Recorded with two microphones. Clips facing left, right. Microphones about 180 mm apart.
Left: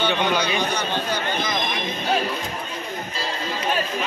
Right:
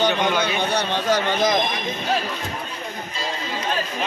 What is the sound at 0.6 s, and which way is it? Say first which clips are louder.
Speech: right 2 dB; 75° right (ahead or behind).